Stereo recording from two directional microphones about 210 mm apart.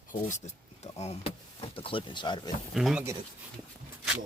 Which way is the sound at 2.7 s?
5° right (ahead or behind).